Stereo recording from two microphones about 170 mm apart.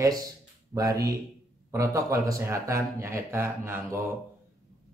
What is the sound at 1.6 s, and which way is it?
Speech, 20° right (ahead or behind).